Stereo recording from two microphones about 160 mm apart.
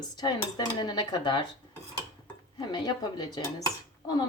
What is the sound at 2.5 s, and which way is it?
Dishes, 25° left (ahead or behind).